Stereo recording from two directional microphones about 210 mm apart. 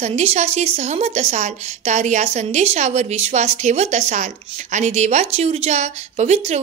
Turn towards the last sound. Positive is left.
turn(degrees=-30)  # may be behind; listen again after turning